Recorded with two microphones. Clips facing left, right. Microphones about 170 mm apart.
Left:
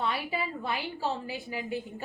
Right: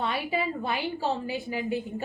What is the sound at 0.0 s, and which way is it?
A woman's voice, 20° right (ahead or behind).